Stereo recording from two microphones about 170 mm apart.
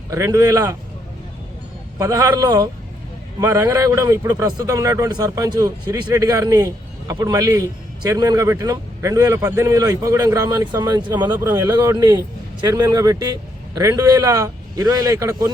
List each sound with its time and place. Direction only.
0.1 s a man's voice: 20° right (ahead or behind)
2.0 s a man's voice: 20° right (ahead or behind)